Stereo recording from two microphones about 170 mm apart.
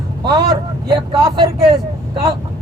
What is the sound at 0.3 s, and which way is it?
A man's voice, 25° right (ahead or behind).